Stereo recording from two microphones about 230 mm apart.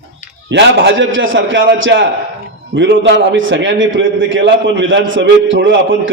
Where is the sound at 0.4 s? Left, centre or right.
Right.